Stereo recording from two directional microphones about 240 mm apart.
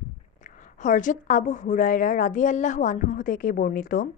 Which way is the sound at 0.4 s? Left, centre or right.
Left.